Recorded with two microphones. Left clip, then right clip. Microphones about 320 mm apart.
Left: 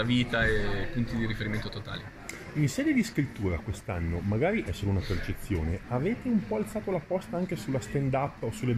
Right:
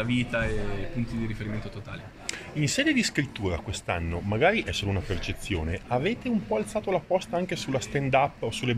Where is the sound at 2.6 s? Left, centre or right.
Right.